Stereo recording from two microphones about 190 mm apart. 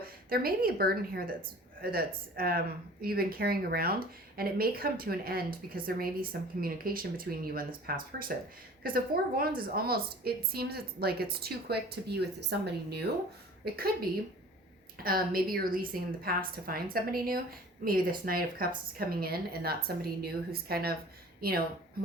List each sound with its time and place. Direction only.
0.0 s a woman's voice: 50° right (ahead or behind)
15.0 s speech: 50° right (ahead or behind)